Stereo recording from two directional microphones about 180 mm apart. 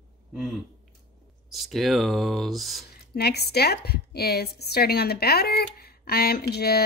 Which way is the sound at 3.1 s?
60° left (ahead or behind).